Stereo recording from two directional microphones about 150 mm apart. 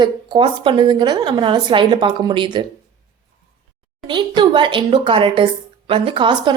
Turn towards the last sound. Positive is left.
turn(degrees=-30)  # may be behind; listen again after turning